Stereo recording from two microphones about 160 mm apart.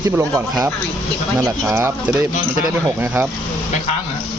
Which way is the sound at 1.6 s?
15° right (ahead or behind).